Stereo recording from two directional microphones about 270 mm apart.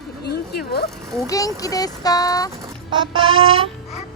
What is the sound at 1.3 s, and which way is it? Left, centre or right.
Speech, centre.